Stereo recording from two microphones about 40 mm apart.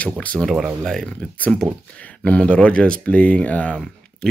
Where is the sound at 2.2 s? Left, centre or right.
Left.